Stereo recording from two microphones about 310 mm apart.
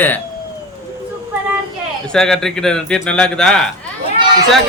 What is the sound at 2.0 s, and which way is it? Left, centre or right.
A man's voice, centre.